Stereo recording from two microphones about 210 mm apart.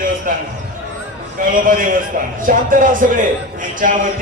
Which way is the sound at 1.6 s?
40° right (ahead or behind).